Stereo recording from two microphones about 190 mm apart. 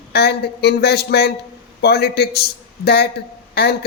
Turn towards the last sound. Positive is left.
turn(degrees=60)  # may be behind; listen again after turning